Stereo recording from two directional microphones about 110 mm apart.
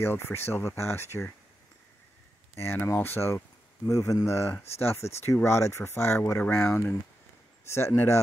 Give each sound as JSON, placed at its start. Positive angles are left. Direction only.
{"t": 0.0, "sound": "speech", "side_deg": 20}
{"t": 2.6, "sound": "speech", "side_deg": 20}